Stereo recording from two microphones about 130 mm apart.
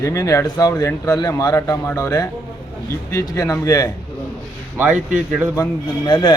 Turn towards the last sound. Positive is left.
turn(degrees=35)  # may be behind; listen again after turning